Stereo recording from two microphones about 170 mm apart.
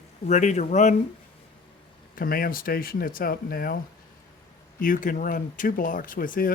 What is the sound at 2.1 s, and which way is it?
Speech, 60° left (ahead or behind).